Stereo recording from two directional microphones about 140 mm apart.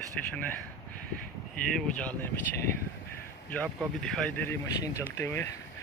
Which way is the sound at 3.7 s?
5° left (ahead or behind).